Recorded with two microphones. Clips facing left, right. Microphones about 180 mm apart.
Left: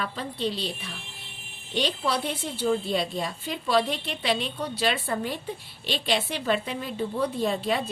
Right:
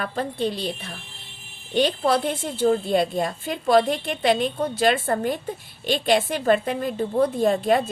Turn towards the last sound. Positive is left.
turn(degrees=-50)  # may be behind; listen again after turning